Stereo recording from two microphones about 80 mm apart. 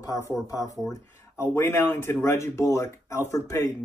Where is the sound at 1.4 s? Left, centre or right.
Left.